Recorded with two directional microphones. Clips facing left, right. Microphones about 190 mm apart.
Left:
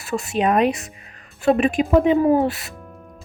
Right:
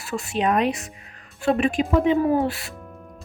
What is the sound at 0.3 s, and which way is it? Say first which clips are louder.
Speech: left 3 dB; 10° left (ahead or behind).